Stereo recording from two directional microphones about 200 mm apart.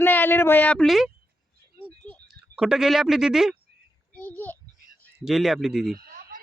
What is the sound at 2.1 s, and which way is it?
Speech, centre (ahead or behind).